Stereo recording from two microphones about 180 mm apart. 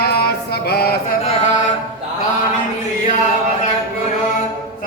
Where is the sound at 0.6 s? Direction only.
60° left (ahead or behind).